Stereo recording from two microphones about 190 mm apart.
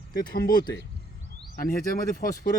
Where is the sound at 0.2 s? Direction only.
50° left (ahead or behind).